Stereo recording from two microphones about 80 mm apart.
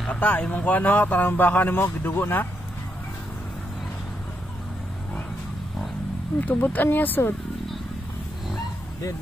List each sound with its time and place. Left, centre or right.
0.1 s speech: centre
6.4 s speech: left